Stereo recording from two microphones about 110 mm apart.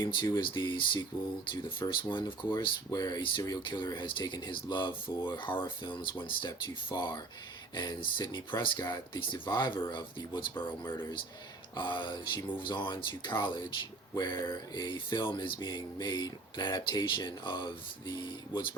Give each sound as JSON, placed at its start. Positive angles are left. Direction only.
{"t": 0.0, "sound": "speech", "side_deg": 45}
{"t": 6.9, "sound": "speech", "side_deg": 35}